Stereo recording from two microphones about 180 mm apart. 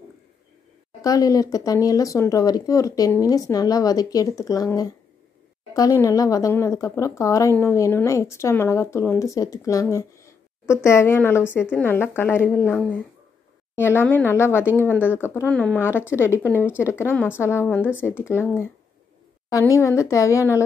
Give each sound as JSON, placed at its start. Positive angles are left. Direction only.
{"t": 1.0, "sound": "a woman's voice", "side_deg": 20}